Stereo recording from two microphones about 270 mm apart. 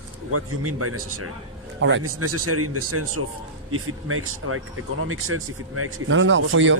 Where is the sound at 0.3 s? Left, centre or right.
Right.